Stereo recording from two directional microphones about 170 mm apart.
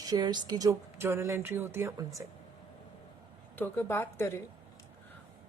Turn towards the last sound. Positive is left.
turn(degrees=15)  # may be behind; listen again after turning